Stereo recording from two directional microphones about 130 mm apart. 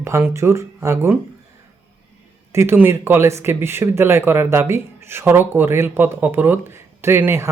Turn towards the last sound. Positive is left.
turn(degrees=-20)  # may be behind; listen again after turning